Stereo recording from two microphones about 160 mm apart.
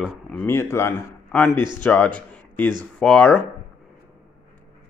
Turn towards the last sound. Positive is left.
turn(degrees=5)  # may be behind; listen again after turning